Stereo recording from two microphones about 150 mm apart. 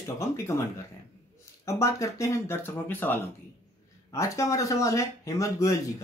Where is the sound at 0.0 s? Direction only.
20° left (ahead or behind).